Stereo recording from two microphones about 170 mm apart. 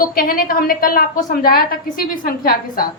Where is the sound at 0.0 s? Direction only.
60° left (ahead or behind).